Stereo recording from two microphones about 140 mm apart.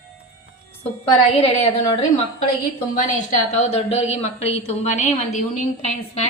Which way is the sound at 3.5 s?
50° left (ahead or behind).